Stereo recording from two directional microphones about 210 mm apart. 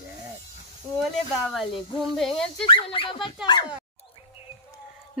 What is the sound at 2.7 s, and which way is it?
Speech, 25° left (ahead or behind).